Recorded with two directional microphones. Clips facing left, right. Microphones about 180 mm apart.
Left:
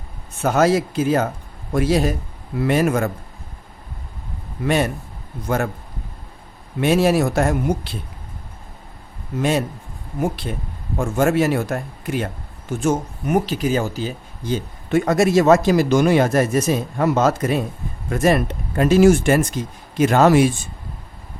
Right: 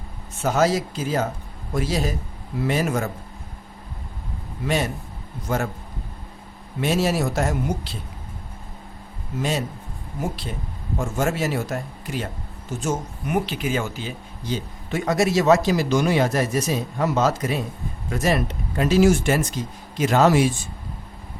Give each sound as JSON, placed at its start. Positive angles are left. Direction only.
{"t": 0.4, "sound": "speech", "side_deg": 60}
{"t": 4.6, "sound": "speech", "side_deg": 55}
{"t": 6.8, "sound": "speech", "side_deg": 60}
{"t": 9.4, "sound": "speech", "side_deg": 60}
{"t": 11.2, "sound": "speech", "side_deg": 55}
{"t": 13.2, "sound": "a man's voice", "side_deg": 40}